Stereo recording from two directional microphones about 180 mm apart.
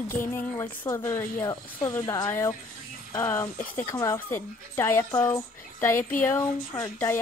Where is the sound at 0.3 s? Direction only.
15° left (ahead or behind).